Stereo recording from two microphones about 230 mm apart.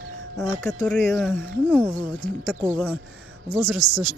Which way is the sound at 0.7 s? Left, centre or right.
Centre.